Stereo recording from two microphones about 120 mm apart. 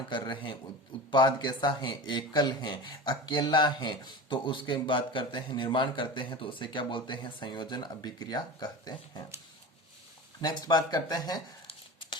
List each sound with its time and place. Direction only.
0.1 s a man's voice: 40° left (ahead or behind)
10.4 s a man's voice: 35° left (ahead or behind)